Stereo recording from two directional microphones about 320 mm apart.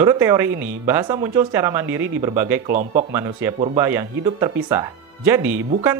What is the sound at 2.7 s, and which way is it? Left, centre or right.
Speech, right.